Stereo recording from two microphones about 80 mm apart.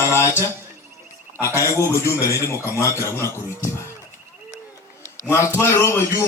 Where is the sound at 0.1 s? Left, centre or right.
Left.